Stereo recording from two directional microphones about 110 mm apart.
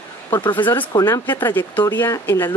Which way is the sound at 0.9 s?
30° left (ahead or behind).